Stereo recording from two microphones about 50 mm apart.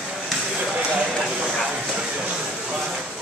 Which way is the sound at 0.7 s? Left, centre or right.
Right.